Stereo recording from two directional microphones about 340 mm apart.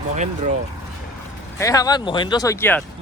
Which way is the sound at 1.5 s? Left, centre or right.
Centre.